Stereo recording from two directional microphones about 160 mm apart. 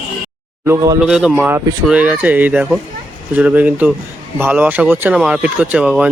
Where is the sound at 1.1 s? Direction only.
5° right (ahead or behind).